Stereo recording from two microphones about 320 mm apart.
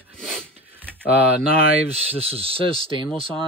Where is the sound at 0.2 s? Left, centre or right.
Centre.